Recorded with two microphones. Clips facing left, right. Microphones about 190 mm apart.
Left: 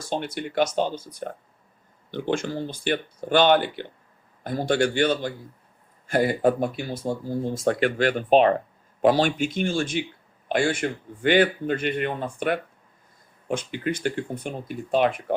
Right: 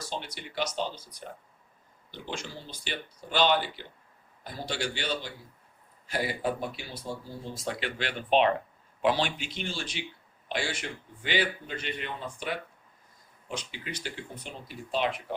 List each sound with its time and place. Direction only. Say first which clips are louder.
0.1 s a man's voice: left 14 dB; 55° left (ahead or behind)